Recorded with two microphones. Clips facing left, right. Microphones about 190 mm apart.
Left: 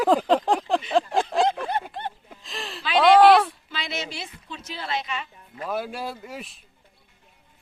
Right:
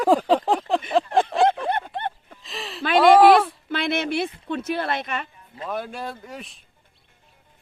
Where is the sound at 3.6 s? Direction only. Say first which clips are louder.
Right 9 dB; 55° right (ahead or behind).